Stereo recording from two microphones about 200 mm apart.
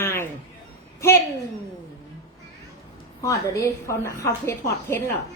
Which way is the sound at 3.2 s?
15° left (ahead or behind).